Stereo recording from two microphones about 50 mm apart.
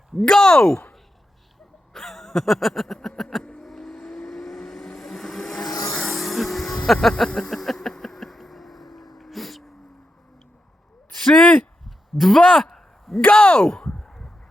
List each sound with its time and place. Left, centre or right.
0.2 s speech: centre
1.9 s a sound: centre
3.2 s vehicle: centre
6.0 s music: centre
6.8 s speech: centre
7.3 s a sound: centre
11.2 s speech: centre
12.7 s a sound: centre
13.2 s speech: left